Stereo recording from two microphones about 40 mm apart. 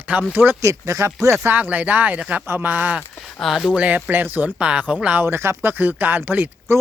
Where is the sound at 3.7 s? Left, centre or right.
Right.